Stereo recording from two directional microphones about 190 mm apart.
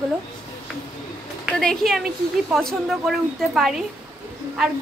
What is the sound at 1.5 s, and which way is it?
A woman's voice, 5° left (ahead or behind).